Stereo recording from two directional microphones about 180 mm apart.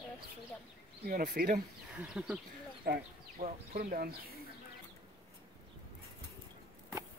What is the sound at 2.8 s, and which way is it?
Speech, 55° right (ahead or behind).